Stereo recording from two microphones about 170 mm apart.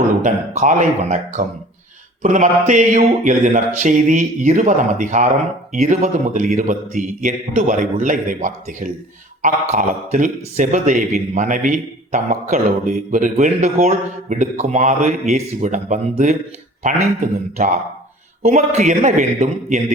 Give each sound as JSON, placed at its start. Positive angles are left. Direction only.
{"t": 0.2, "sound": "speech", "side_deg": -45}